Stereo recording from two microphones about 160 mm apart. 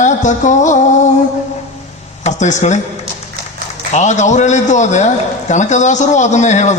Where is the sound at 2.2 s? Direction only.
50° left (ahead or behind).